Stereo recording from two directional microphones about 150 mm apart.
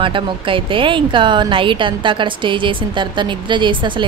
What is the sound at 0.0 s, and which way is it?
Speech, 35° right (ahead or behind).